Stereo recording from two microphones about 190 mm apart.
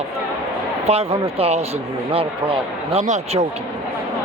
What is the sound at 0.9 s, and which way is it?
A man's voice, 30° right (ahead or behind).